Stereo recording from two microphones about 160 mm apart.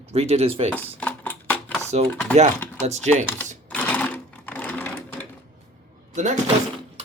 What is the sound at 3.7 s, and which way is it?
Sewing machine, 10° left (ahead or behind).